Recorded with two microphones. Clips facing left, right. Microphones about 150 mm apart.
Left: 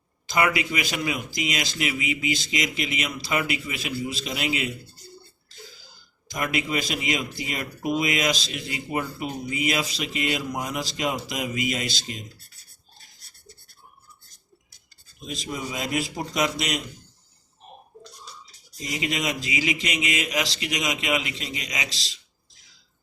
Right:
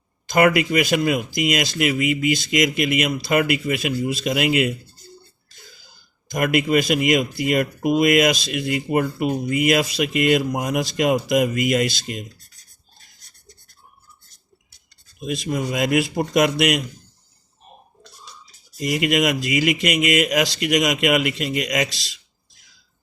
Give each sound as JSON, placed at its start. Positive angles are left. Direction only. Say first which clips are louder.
{"t": 0.3, "sound": "a man's voice", "louder": "right 7 dB", "side_deg": -45}
{"t": 6.3, "sound": "speech", "louder": "right 8 dB", "side_deg": -55}
{"t": 15.2, "sound": "speech", "louder": "right 8 dB", "side_deg": -65}
{"t": 18.8, "sound": "speech", "louder": "right 9 dB", "side_deg": -60}